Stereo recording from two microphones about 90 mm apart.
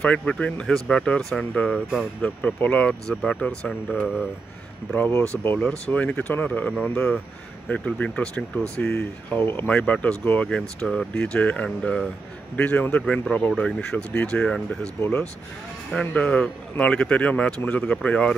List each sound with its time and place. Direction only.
0.0 s speech: 10° left (ahead or behind)
2.2 s speech: 15° left (ahead or behind)
5.6 s speech: 10° left (ahead or behind)
9.7 s speech: 10° left (ahead or behind)
10.5 s speech: 5° left (ahead or behind)
12.9 s speech: 5° left (ahead or behind)